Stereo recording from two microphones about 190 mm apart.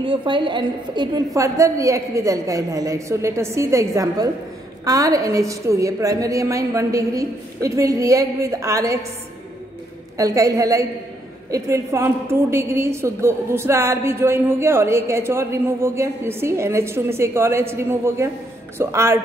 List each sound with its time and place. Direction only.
0.0 s a woman's voice: 25° right (ahead or behind)
10.1 s a woman's voice: 15° right (ahead or behind)